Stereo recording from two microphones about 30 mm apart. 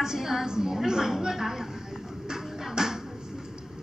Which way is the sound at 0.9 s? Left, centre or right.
Centre.